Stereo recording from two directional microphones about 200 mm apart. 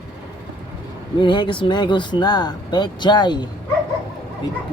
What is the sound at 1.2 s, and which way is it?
Speech, 25° left (ahead or behind).